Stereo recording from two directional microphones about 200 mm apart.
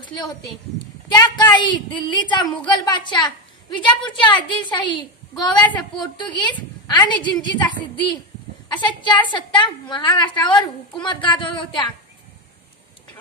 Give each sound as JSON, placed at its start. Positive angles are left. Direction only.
{"t": 1.1, "sound": "a woman's voice", "side_deg": 20}